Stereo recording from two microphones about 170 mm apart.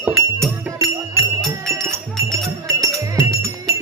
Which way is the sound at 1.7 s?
15° right (ahead or behind).